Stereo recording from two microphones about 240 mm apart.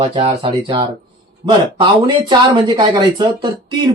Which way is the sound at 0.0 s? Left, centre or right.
Right.